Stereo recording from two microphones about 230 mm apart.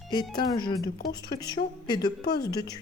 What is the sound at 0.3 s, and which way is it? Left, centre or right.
A woman's voice, centre.